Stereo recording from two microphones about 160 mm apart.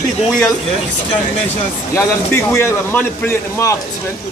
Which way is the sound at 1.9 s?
15° left (ahead or behind).